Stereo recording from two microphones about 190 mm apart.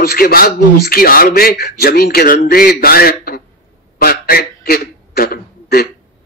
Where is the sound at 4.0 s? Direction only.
50° left (ahead or behind).